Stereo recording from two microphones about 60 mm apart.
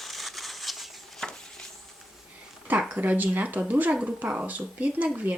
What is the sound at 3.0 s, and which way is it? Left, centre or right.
Speech, right.